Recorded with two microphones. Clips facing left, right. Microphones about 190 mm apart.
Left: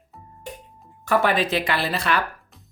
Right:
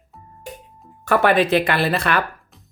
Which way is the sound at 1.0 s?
60° right (ahead or behind).